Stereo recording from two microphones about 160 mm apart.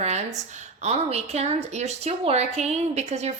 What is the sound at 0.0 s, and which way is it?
A woman's voice, 45° right (ahead or behind).